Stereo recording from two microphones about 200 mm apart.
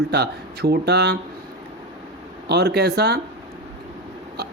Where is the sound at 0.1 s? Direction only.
55° right (ahead or behind).